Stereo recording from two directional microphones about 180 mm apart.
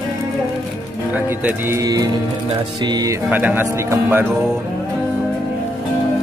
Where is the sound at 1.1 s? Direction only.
10° right (ahead or behind).